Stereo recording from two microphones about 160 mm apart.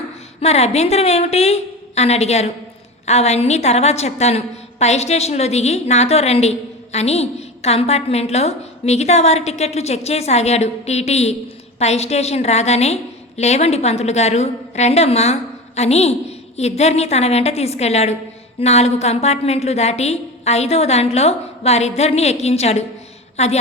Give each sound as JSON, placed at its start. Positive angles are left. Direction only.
{"t": 0.3, "sound": "a woman's voice", "side_deg": 40}